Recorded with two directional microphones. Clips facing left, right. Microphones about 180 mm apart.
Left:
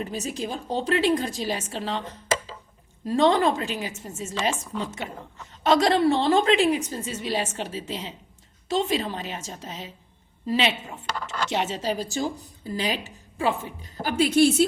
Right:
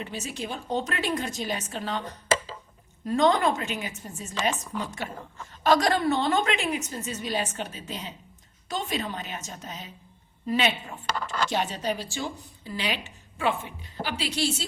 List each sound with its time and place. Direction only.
0.0 s a woman's voice: 35° left (ahead or behind)
14.0 s a woman's voice: 45° left (ahead or behind)